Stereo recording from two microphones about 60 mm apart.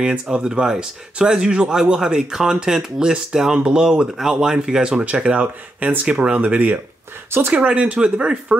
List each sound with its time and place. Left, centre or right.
0.0 s speech: centre
7.2 s speech: right
7.5 s speech: centre